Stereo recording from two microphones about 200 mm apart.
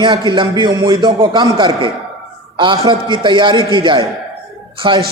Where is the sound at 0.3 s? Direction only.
20° right (ahead or behind).